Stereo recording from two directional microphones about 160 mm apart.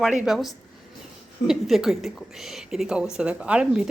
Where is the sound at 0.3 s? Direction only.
Centre (ahead or behind).